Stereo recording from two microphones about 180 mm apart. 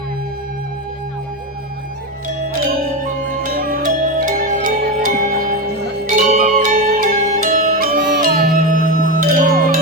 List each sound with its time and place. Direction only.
3.2 s music: 55° right (ahead or behind)
8.5 s music: 50° right (ahead or behind)